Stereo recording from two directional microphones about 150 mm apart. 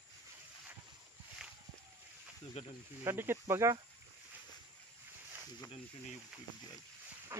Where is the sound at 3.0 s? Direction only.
15° right (ahead or behind).